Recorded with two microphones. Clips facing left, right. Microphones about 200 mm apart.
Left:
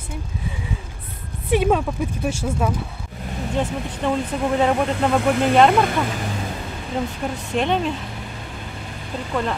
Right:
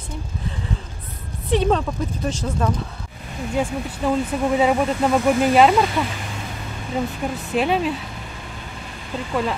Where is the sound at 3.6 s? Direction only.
10° right (ahead or behind).